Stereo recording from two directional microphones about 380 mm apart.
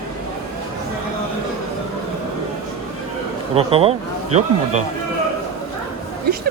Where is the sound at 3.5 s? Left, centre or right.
Centre.